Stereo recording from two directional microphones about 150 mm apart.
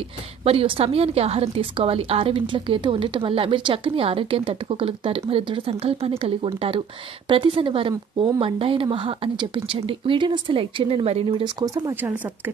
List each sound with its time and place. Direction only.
0.4 s a woman's voice: 40° right (ahead or behind)